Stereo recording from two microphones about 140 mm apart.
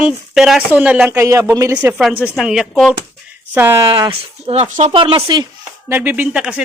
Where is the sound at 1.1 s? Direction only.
20° right (ahead or behind).